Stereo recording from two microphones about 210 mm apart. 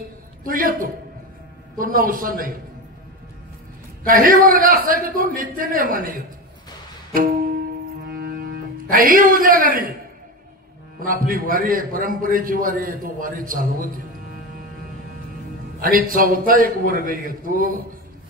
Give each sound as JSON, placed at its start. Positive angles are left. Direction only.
{"t": 0.4, "sound": "a man's voice", "side_deg": -40}
{"t": 4.1, "sound": "a man's voice", "side_deg": -40}
{"t": 8.1, "sound": "music", "side_deg": -45}
{"t": 8.9, "sound": "a man's voice", "side_deg": -40}
{"t": 11.0, "sound": "a man's voice", "side_deg": -40}
{"t": 15.8, "sound": "a man's voice", "side_deg": -40}